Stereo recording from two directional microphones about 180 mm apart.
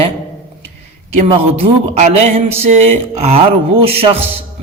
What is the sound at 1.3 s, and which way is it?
A man's voice, 35° right (ahead or behind).